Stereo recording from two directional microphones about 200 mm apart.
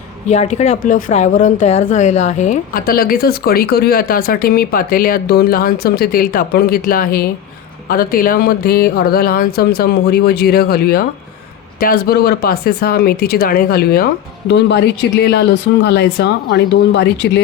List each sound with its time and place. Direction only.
0.3 s speech: 35° left (ahead or behind); by 17.4 s 60° left (ahead or behind)